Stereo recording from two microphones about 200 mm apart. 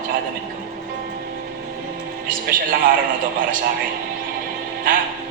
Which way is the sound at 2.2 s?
45° right (ahead or behind).